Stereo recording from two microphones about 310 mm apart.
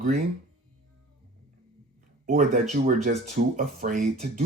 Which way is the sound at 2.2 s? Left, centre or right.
Right.